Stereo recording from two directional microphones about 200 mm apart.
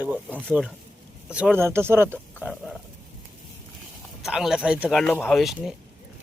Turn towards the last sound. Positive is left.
turn(degrees=0)  # may be behind; listen again after turning